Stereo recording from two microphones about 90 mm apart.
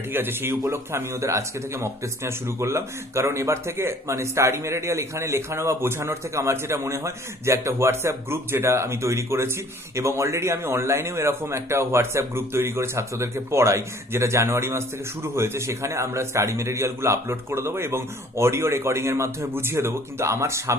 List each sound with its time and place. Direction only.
0.1 s a man's voice: 25° right (ahead or behind)